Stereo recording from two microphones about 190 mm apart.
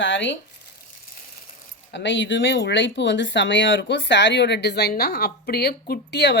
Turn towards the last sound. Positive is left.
turn(degrees=60)  # may be behind; listen again after turning